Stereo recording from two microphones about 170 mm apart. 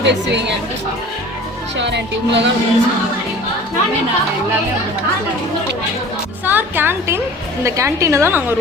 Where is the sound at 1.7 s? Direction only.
90° right.